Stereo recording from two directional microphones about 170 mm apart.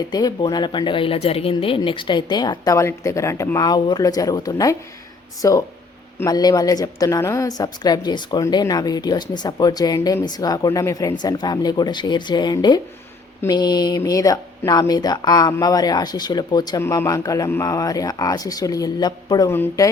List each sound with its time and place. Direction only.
0.1 s a woman's voice: 25° left (ahead or behind)